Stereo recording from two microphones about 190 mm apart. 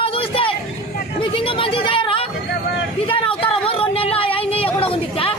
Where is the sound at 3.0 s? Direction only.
25° left (ahead or behind).